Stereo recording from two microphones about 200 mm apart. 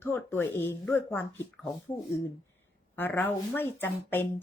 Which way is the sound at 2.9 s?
10° left (ahead or behind).